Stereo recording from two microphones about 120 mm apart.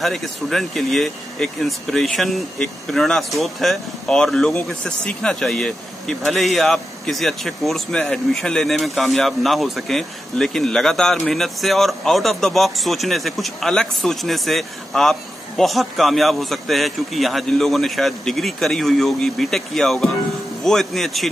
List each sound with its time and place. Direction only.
0.0 s speech: centre (ahead or behind)